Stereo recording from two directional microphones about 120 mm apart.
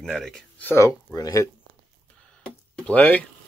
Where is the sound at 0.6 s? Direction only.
25° left (ahead or behind).